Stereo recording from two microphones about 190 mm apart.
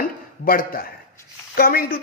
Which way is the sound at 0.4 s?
50° left (ahead or behind).